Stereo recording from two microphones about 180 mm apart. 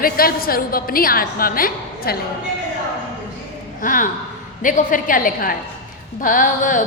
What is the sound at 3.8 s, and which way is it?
A woman's voice, 50° left (ahead or behind).